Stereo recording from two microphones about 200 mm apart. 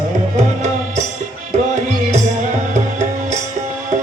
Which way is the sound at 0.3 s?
35° right (ahead or behind).